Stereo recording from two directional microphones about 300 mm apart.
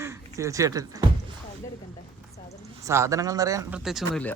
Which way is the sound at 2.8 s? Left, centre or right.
Centre.